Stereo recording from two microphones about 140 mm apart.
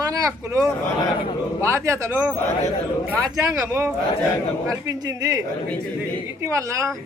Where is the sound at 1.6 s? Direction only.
20° right (ahead or behind).